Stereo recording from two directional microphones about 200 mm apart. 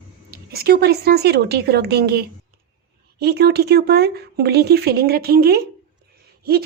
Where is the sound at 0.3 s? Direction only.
50° right (ahead or behind).